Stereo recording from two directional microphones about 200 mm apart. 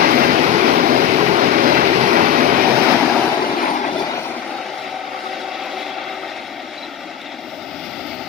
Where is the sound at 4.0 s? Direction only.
15° left (ahead or behind).